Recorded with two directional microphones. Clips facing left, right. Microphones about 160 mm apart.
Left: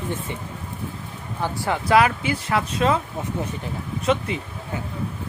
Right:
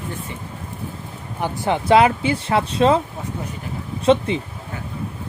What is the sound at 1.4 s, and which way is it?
Speech, 20° right (ahead or behind).